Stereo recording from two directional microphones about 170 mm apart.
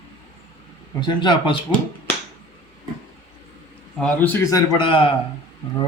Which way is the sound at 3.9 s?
10° left (ahead or behind).